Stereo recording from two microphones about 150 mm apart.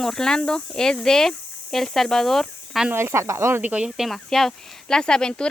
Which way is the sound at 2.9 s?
15° right (ahead or behind).